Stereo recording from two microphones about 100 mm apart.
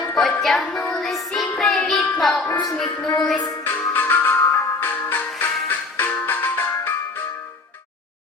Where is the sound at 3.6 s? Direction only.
20° left (ahead or behind).